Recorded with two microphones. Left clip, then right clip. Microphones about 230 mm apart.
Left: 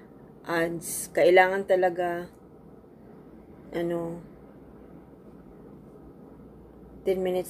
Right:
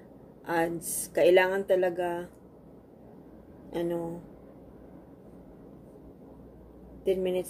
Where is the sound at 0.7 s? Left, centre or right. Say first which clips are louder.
Left 1 dB; right.